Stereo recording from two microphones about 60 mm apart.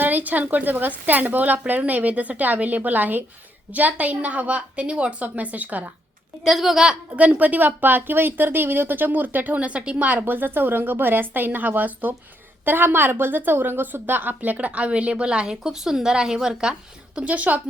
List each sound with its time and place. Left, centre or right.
0.0 s a woman's voice: right
6.4 s a woman's voice: centre
7.2 s a woman's voice: right
17.2 s a woman's voice: right